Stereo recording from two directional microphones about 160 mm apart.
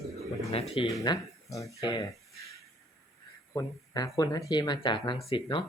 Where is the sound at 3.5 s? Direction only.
20° left (ahead or behind).